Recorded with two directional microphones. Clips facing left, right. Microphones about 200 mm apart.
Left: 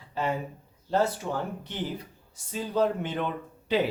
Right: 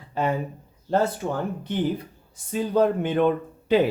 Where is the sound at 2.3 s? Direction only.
55° right (ahead or behind).